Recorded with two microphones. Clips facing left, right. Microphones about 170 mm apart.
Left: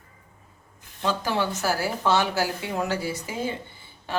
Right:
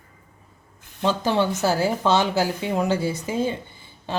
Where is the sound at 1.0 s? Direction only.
20° right (ahead or behind).